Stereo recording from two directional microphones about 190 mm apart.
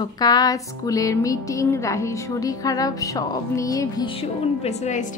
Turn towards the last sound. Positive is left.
turn(degrees=40)  # may be behind; listen again after turning